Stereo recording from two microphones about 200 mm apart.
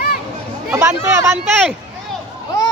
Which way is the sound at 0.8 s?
15° right (ahead or behind).